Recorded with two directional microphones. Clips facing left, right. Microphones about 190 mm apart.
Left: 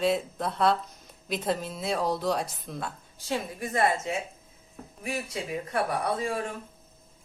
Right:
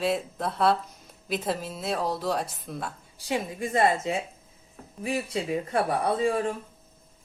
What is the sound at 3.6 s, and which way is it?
A man's voice, 30° right (ahead or behind).